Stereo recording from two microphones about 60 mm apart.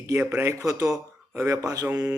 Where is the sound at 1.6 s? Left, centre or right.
Right.